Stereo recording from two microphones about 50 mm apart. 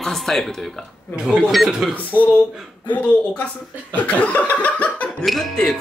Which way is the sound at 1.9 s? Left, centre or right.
Left.